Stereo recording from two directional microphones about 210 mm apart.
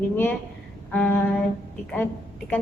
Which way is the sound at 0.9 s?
10° left (ahead or behind).